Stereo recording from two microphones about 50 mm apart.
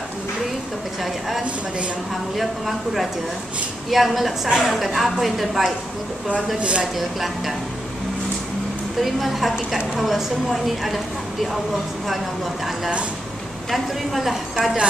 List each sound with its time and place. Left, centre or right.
2.3 s a woman's voice: centre
6.2 s a woman's voice: right
9.0 s a woman's voice: centre
13.7 s a woman's voice: centre